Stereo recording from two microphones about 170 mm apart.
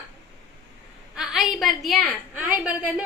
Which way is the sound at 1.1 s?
5° right (ahead or behind).